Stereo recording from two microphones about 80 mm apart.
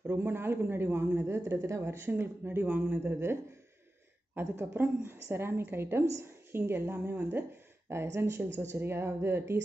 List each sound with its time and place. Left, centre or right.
0.0 s a man's voice: right
4.4 s a woman's voice: right